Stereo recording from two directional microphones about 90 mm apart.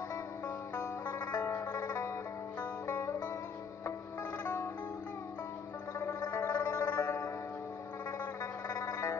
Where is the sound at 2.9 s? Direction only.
20° left (ahead or behind).